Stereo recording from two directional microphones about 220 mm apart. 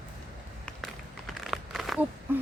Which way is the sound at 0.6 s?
Centre (ahead or behind).